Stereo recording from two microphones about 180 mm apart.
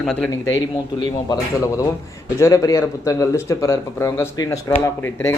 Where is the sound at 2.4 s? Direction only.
20° left (ahead or behind).